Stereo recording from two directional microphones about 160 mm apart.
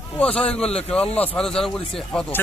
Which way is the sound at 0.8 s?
40° left (ahead or behind).